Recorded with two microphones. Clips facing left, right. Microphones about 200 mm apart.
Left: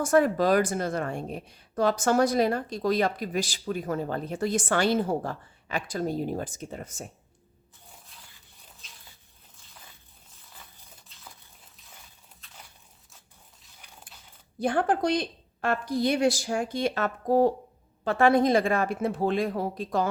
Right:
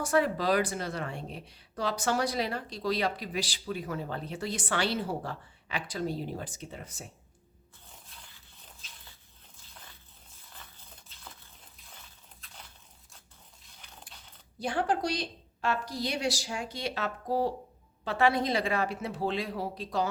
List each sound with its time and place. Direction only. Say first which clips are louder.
0.0 s speech: left 5 dB; 50° left (ahead or behind)
14.1 s a sound: even; 5° left (ahead or behind)
14.6 s speech: left 5 dB; 55° left (ahead or behind)